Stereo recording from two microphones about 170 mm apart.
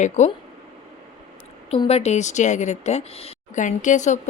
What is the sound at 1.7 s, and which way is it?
Speech, 35° left (ahead or behind).